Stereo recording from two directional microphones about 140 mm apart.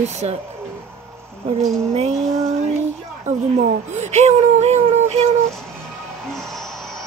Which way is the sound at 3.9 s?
55° right (ahead or behind).